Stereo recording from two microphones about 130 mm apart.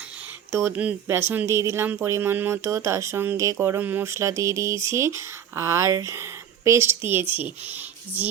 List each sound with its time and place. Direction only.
0.5 s speech: 15° right (ahead or behind)